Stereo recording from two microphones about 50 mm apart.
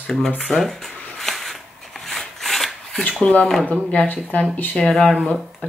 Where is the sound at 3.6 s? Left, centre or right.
Left.